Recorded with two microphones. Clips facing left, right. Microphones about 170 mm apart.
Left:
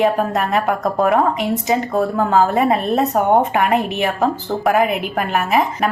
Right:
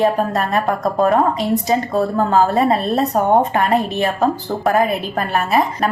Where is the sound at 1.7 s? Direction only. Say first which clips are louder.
Even; 15° left (ahead or behind).